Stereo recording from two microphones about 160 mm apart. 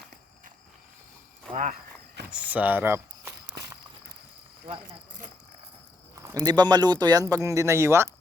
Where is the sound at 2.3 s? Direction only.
10° right (ahead or behind).